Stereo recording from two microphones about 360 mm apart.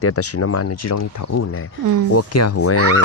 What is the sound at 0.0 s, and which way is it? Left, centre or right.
Speech, left.